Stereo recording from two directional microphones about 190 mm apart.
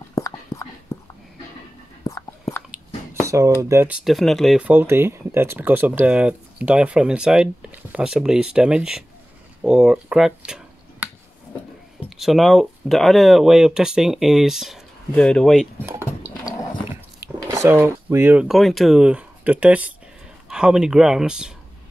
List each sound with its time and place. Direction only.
0.1 s whispering: 15° left (ahead or behind)
2.0 s a sound: 15° left (ahead or behind)
2.7 s a sound: 15° right (ahead or behind)
3.6 s speech: 10° right (ahead or behind)
12.2 s speech: centre (ahead or behind)
16.9 s speech: 15° right (ahead or behind)